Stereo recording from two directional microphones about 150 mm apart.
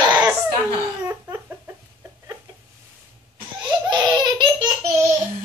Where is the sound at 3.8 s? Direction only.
30° right (ahead or behind).